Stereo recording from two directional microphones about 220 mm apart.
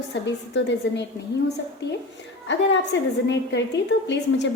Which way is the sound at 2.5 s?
55° left (ahead or behind).